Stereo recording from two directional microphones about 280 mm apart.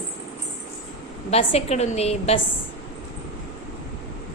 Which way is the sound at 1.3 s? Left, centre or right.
Left.